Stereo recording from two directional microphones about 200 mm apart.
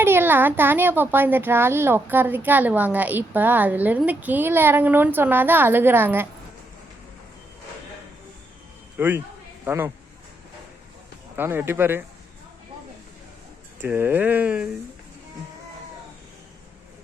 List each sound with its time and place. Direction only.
0.0 s a child's voice: 10° right (ahead or behind)
9.0 s a child's voice: 10° right (ahead or behind)
11.3 s a child's voice: 10° right (ahead or behind)
13.8 s a child's voice: 10° right (ahead or behind)